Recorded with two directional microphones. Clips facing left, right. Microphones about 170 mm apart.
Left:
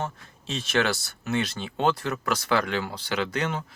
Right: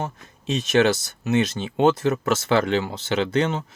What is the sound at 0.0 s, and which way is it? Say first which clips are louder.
Speech: right 3 dB; 20° right (ahead or behind).